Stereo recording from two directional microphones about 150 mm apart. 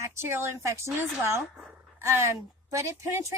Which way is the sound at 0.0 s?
20° right (ahead or behind).